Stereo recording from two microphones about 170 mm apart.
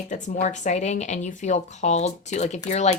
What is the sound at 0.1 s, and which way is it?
Speech, 45° left (ahead or behind).